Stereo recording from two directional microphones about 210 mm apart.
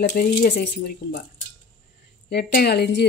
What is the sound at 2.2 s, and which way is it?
Speech, 50° left (ahead or behind).